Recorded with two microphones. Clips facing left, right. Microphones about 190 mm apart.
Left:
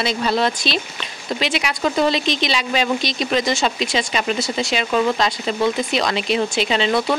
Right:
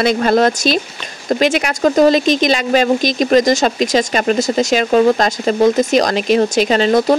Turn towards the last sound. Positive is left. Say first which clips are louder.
# right 6 dB
turn(degrees=-45)  # may be behind; listen again after turning